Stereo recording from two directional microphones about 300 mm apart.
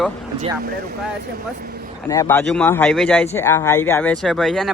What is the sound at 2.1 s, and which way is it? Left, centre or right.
Speech, centre.